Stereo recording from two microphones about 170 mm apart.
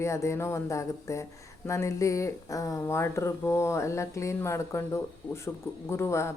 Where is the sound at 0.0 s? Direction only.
15° left (ahead or behind).